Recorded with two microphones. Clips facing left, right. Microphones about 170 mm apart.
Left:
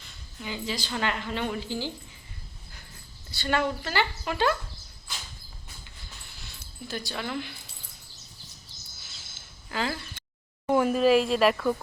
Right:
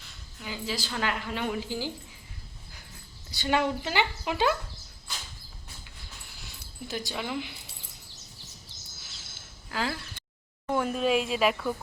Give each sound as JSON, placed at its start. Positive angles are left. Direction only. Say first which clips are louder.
{"t": 0.0, "sound": "a woman's voice", "louder": "left 3 dB", "side_deg": 0}
{"t": 3.4, "sound": "speech", "louder": "right 1 dB", "side_deg": -15}
{"t": 6.5, "sound": "speech", "louder": "even", "side_deg": -15}
{"t": 9.6, "sound": "speech", "louder": "left 1 dB", "side_deg": 0}